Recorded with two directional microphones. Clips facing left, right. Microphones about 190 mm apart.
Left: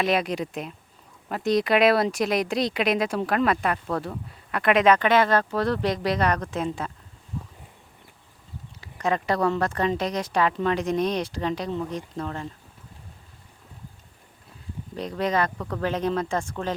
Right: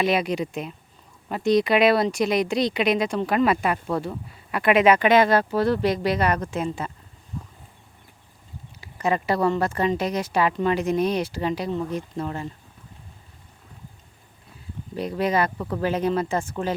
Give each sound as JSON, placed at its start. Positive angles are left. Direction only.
{"t": 0.0, "sound": "speech", "side_deg": 0}
{"t": 7.3, "sound": "a sound", "side_deg": 5}
{"t": 8.8, "sound": "speech", "side_deg": -5}
{"t": 14.9, "sound": "speech", "side_deg": -5}